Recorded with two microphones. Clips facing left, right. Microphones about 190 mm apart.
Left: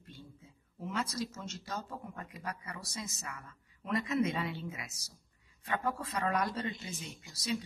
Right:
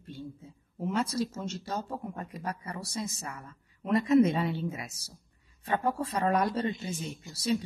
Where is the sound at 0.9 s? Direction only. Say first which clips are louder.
Right 7 dB; 30° right (ahead or behind).